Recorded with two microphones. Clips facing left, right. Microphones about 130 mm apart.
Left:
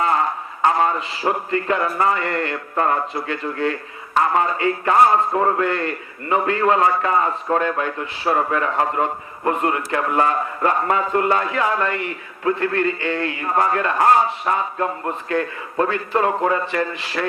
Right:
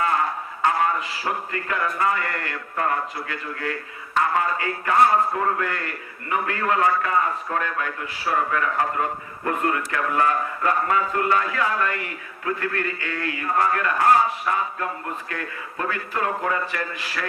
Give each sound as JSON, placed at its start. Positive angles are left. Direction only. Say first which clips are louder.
{"t": 0.6, "sound": "a man's voice", "louder": "left 4 dB", "side_deg": 30}